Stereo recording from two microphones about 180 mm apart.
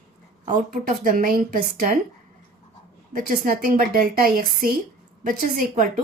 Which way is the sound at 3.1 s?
50° right (ahead or behind).